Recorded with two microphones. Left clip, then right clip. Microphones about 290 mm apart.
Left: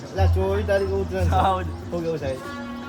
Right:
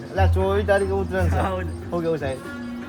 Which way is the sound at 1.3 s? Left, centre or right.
Centre.